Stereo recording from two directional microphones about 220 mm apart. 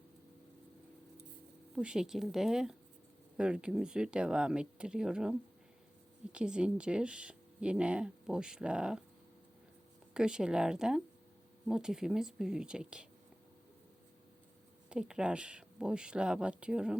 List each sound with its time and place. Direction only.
1.7 s speech: 5° right (ahead or behind)
10.2 s speech: 5° right (ahead or behind)
14.8 s speech: 5° right (ahead or behind)